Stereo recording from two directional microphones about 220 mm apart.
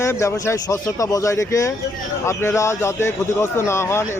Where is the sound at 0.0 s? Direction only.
10° left (ahead or behind).